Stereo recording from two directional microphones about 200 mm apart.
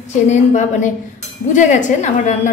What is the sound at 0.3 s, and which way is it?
A woman's voice, 35° left (ahead or behind).